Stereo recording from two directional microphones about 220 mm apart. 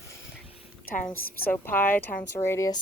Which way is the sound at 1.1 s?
10° left (ahead or behind).